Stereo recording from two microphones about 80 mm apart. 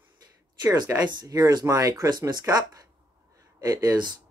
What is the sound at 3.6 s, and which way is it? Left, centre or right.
Speech, right.